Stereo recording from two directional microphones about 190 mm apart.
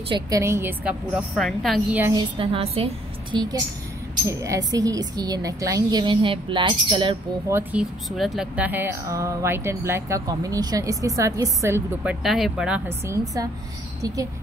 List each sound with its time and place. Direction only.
0.1 s speech: 15° right (ahead or behind)
2.1 s speech: 30° right (ahead or behind)
4.3 s speech: 15° right (ahead or behind)
7.5 s speech: 5° right (ahead or behind)